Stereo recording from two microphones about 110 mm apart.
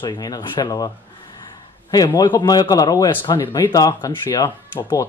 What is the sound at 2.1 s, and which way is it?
Speech, 40° left (ahead or behind).